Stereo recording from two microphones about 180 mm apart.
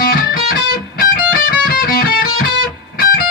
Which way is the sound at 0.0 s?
50° left (ahead or behind).